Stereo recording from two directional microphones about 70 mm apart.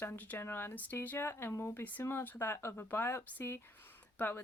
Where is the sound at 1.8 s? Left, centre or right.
Left.